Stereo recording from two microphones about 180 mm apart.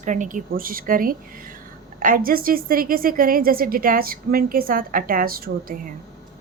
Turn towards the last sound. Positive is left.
turn(degrees=-50)  # may be behind; listen again after turning